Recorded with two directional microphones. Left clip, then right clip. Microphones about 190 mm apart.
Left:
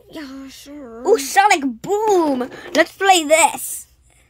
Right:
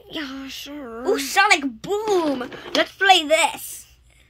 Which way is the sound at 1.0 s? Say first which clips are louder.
Left 4 dB; 50° left (ahead or behind).